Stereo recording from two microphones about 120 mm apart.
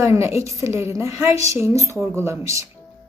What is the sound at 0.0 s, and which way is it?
A woman's voice, 25° right (ahead or behind).